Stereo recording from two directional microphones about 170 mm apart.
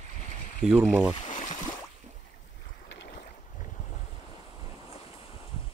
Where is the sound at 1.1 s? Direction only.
30° left (ahead or behind).